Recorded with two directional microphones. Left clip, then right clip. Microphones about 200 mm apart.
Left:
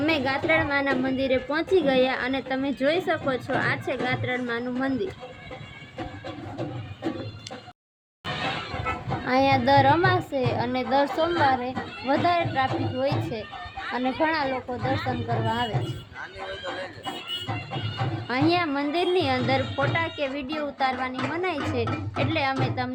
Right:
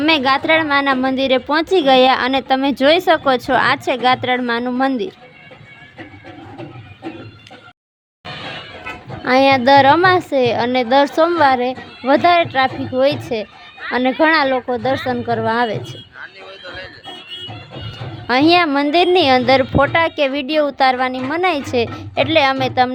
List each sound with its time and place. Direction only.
0.0 s a woman's voice: 55° right (ahead or behind)
9.2 s a woman's voice: 50° right (ahead or behind)
18.3 s a woman's voice: 55° right (ahead or behind)